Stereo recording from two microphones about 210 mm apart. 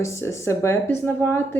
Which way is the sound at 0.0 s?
15° left (ahead or behind).